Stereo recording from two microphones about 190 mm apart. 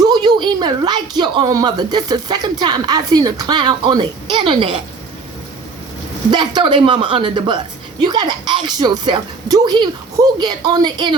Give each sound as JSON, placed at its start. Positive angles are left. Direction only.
{"t": 0.0, "sound": "speech", "side_deg": -20}
{"t": 6.3, "sound": "speech", "side_deg": -25}